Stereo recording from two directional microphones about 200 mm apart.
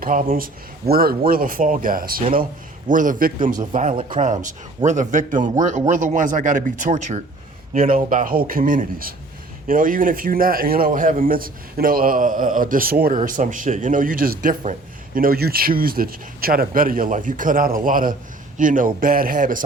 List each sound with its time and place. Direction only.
0.0 s speech: 40° right (ahead or behind)